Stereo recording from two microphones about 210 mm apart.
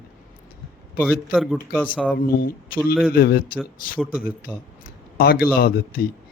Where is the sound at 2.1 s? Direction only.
45° left (ahead or behind).